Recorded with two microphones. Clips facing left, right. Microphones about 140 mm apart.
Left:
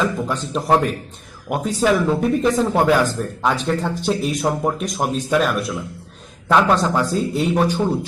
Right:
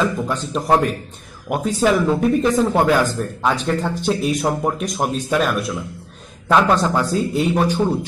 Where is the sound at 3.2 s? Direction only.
Centre (ahead or behind).